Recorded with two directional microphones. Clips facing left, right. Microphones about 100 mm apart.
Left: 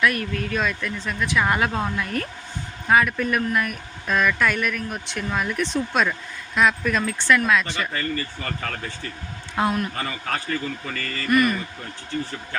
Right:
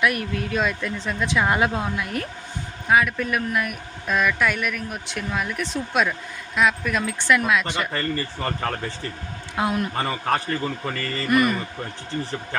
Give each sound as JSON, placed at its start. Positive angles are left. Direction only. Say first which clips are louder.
{"t": 0.0, "sound": "speech", "louder": "even", "side_deg": -15}
{"t": 7.9, "sound": "a man's voice", "louder": "right 1 dB", "side_deg": -35}
{"t": 9.6, "sound": "a man's voice", "louder": "left 1 dB", "side_deg": -15}
{"t": 10.0, "sound": "a man's voice", "louder": "right 5 dB", "side_deg": -40}
{"t": 11.3, "sound": "speech", "louder": "even", "side_deg": -20}